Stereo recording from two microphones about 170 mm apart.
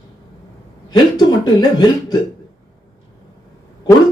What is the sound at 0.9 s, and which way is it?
Speech, 25° left (ahead or behind).